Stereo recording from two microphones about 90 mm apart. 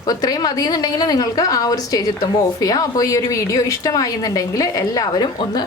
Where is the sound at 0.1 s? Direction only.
45° left (ahead or behind).